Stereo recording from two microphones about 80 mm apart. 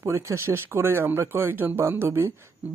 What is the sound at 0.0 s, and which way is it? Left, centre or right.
Speech, right.